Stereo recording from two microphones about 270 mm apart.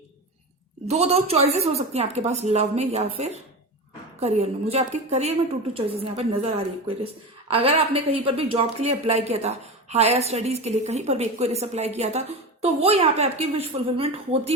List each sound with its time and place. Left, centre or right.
0.9 s a woman's voice: right